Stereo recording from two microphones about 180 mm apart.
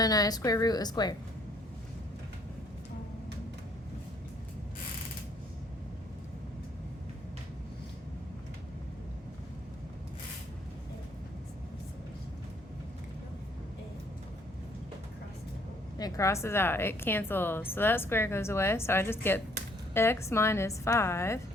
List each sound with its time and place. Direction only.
0.0 s a woman's voice: 20° left (ahead or behind)
16.0 s a woman's voice: 20° left (ahead or behind)